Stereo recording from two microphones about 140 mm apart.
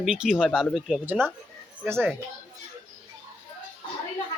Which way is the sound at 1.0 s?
15° right (ahead or behind).